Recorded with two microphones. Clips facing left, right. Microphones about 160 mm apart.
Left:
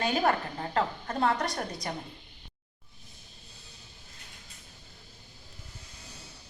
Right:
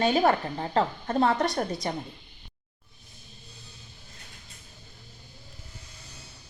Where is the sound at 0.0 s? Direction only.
25° right (ahead or behind).